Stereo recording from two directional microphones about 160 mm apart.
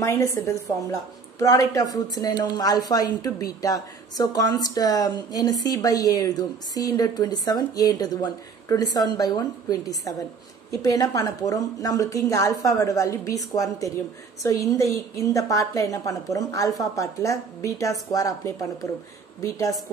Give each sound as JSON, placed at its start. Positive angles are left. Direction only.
{"t": 0.0, "sound": "a woman's voice", "side_deg": 15}